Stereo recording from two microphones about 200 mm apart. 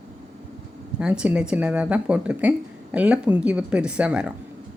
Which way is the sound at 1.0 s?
5° right (ahead or behind).